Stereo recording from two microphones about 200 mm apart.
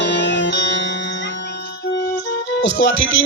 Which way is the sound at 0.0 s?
65° left (ahead or behind).